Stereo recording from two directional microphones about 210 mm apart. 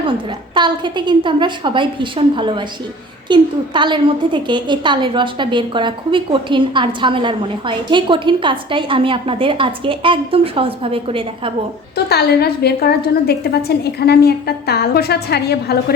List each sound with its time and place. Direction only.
0.5 s a woman's voice: 20° right (ahead or behind)
11.9 s a woman's voice: 50° left (ahead or behind)